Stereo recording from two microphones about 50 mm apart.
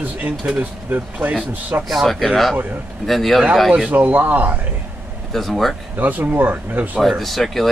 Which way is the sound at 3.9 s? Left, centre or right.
Right.